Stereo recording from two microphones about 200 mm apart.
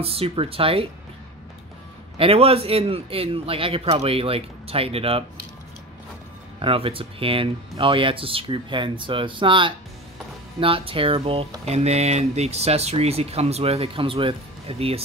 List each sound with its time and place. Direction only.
0.0 s speech: 30° right (ahead or behind)
2.1 s speech: 30° right (ahead or behind)
6.6 s speech: 25° right (ahead or behind)